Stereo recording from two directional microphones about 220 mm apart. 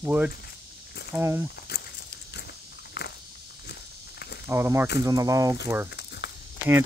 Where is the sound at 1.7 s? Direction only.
45° left (ahead or behind).